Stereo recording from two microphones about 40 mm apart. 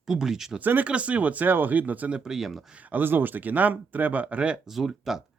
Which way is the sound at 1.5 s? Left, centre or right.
Right.